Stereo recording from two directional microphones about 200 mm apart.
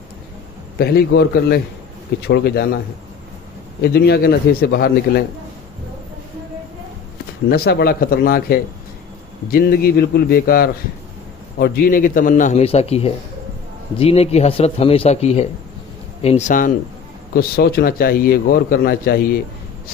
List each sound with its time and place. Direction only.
0.7 s a man's voice: 50° left (ahead or behind)
3.9 s a man's voice: 50° left (ahead or behind)
7.5 s a man's voice: 50° left (ahead or behind)
17.3 s a man's voice: 50° left (ahead or behind)